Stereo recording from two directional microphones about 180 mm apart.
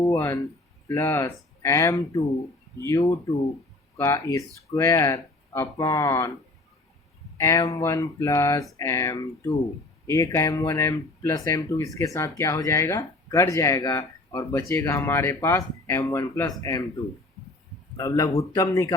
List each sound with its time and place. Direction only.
0.0 s speech: 15° left (ahead or behind)
7.3 s speech: 15° left (ahead or behind)
17.9 s speech: 20° left (ahead or behind)